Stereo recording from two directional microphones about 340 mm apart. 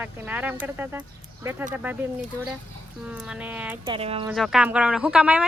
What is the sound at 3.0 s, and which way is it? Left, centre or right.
Speech, centre.